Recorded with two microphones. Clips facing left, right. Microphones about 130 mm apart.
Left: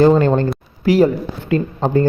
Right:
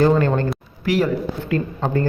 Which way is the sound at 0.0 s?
25° left (ahead or behind).